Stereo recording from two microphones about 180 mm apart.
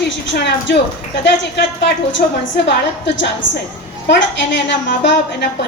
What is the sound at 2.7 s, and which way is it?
A woman's voice, 75° left (ahead or behind).